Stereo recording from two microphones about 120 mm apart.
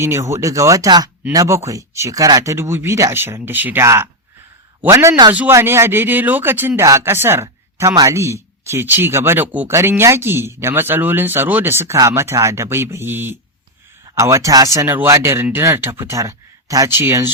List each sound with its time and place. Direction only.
0.0 s speech: 20° right (ahead or behind)